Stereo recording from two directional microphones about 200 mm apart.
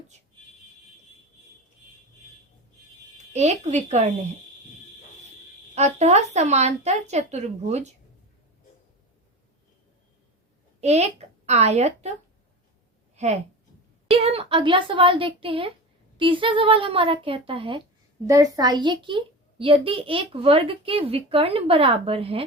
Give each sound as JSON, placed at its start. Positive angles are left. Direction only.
{"t": 3.3, "sound": "speech", "side_deg": -35}
{"t": 5.7, "sound": "speech", "side_deg": -35}
{"t": 10.8, "sound": "a woman's voice", "side_deg": -35}
{"t": 13.1, "sound": "a woman's voice", "side_deg": -35}